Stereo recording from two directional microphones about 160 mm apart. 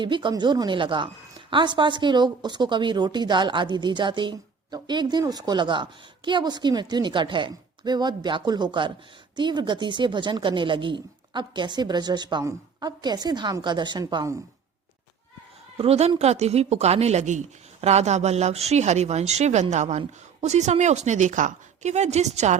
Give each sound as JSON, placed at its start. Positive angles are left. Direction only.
{"t": 0.0, "sound": "a woman's voice", "side_deg": -30}
{"t": 15.8, "sound": "speech", "side_deg": -40}